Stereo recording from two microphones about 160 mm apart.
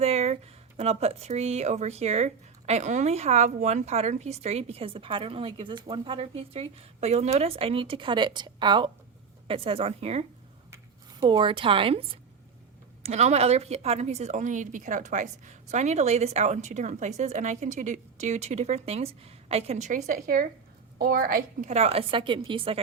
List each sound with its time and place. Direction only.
0.0 s a sound: 40° right (ahead or behind)
0.8 s speech: 40° right (ahead or behind)
11.2 s a woman's voice: 30° right (ahead or behind); by 21.4 s 65° right (ahead or behind)
21.7 s speech: 40° right (ahead or behind)